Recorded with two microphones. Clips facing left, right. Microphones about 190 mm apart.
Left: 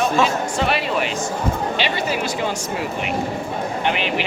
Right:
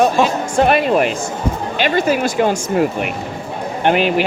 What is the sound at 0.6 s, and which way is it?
Speech, 50° right (ahead or behind).